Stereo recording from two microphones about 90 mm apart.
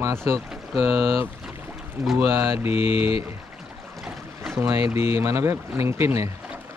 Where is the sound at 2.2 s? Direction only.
25° right (ahead or behind).